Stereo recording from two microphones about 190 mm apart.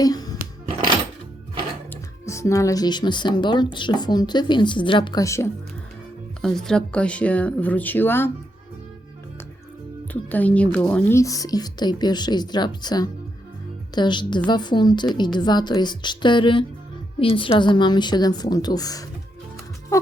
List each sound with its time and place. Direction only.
0.0 s speech: 20° left (ahead or behind)
1.9 s speech: 15° left (ahead or behind)
6.4 s speech: 5° left (ahead or behind)
10.1 s speech: 10° left (ahead or behind)